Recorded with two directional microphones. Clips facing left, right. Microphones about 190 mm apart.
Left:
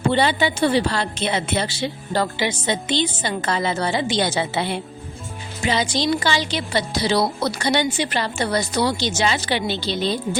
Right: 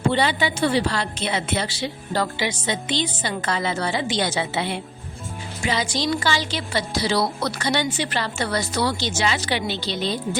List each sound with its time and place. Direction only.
0.1 s a woman's voice: 30° left (ahead or behind)
5.6 s a woman's voice: 25° left (ahead or behind)
9.2 s a woman's voice: 30° left (ahead or behind)